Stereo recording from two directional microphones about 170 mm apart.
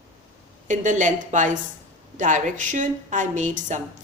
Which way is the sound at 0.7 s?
45° right (ahead or behind).